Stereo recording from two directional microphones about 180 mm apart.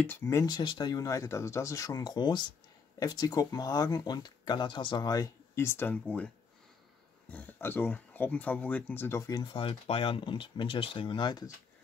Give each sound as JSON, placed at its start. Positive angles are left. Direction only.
{"t": 0.0, "sound": "speech", "side_deg": 10}